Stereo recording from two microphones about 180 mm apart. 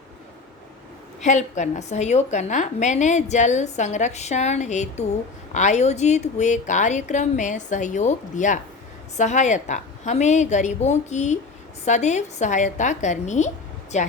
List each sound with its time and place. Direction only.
1.2 s a woman's voice: 40° left (ahead or behind)